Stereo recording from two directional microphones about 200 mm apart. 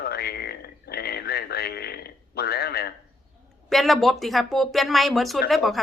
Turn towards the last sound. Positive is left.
turn(degrees=0)  # may be behind; listen again after turning